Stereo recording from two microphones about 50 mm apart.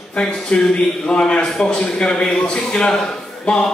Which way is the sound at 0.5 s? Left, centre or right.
Left.